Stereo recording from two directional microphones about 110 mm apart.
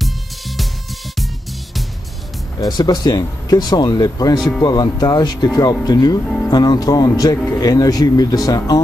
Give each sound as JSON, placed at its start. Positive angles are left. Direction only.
{"t": 0.0, "sound": "music", "side_deg": 0}
{"t": 2.6, "sound": "speech", "side_deg": 40}
{"t": 6.2, "sound": "speech", "side_deg": 5}
{"t": 6.5, "sound": "speech", "side_deg": 40}